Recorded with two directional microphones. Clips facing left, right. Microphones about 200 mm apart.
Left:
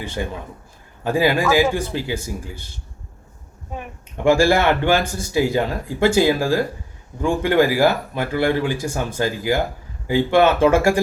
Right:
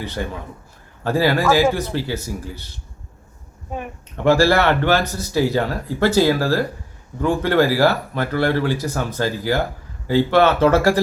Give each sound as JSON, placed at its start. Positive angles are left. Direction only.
{"t": 0.0, "sound": "speech", "side_deg": 15}
{"t": 4.2, "sound": "speech", "side_deg": 10}